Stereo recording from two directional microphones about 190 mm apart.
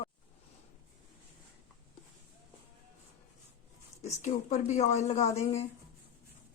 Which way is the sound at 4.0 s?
35° left (ahead or behind).